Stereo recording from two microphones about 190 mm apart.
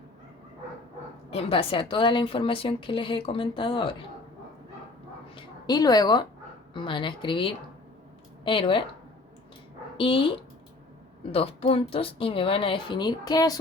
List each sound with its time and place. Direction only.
1.3 s speech: 30° left (ahead or behind)
5.3 s a sound: 25° left (ahead or behind)
6.7 s speech: 25° left (ahead or behind)
10.0 s speech: 30° left (ahead or behind)